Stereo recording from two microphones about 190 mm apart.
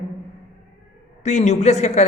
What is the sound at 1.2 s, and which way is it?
Speech, 35° left (ahead or behind).